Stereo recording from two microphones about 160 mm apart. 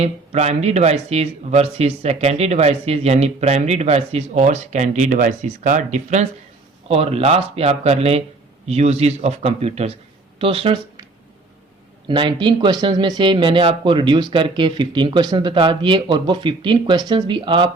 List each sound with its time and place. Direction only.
0.0 s speech: 45° right (ahead or behind)
12.0 s speech: 30° right (ahead or behind)